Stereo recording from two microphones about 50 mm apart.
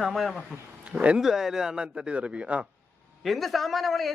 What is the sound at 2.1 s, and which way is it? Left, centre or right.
Speech, right.